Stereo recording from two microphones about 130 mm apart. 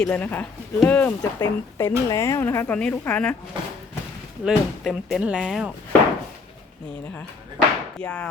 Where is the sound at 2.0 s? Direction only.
20° left (ahead or behind).